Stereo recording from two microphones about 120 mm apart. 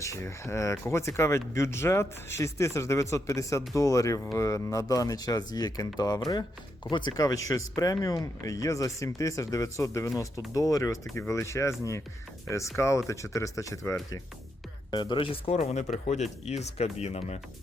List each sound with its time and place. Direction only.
0.0 s speech: 25° left (ahead or behind)
12.7 s speech: 25° left (ahead or behind)
14.8 s speech: 40° left (ahead or behind); by 17.4 s 65° left (ahead or behind)